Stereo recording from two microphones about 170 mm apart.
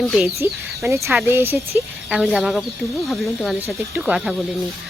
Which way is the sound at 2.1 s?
5° right (ahead or behind).